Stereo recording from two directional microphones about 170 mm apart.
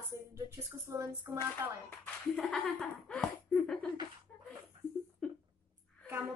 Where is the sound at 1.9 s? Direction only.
5° left (ahead or behind).